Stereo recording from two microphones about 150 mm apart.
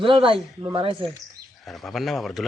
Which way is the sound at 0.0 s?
35° right (ahead or behind).